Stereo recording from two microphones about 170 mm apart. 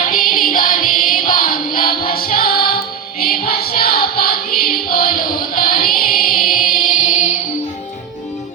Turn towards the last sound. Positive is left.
turn(degrees=50)  # may be behind; listen again after turning